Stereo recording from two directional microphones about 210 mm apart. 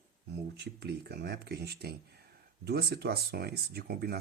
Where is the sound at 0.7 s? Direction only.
50° right (ahead or behind).